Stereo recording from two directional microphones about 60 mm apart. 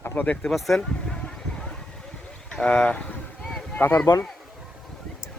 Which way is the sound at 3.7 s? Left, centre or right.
Left.